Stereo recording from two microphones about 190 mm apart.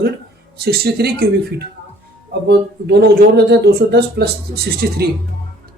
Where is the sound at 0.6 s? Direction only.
55° right (ahead or behind).